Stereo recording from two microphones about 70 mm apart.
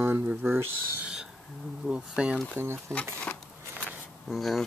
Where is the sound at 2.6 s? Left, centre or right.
Right.